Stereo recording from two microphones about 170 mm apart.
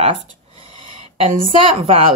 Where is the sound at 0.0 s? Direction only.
35° right (ahead or behind).